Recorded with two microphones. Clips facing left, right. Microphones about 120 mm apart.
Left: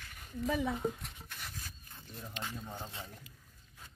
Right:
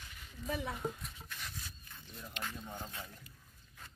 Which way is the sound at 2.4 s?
15° left (ahead or behind).